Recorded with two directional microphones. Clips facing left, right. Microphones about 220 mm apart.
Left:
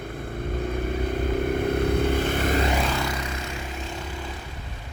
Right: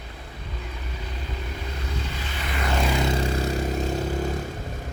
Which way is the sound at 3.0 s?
25° right (ahead or behind).